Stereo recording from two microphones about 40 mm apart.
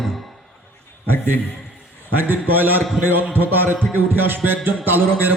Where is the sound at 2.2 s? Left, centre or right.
Right.